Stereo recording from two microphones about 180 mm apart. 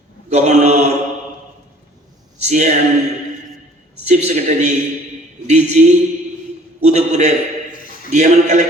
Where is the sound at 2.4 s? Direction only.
40° right (ahead or behind).